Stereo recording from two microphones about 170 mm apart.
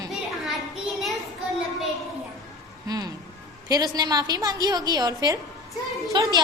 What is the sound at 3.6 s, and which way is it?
A woman's voice, 20° right (ahead or behind).